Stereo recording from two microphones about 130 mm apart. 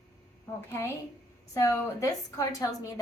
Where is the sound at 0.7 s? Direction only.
20° left (ahead or behind).